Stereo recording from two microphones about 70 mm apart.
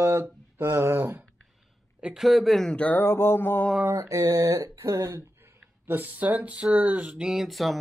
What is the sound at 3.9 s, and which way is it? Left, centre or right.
Speech, right.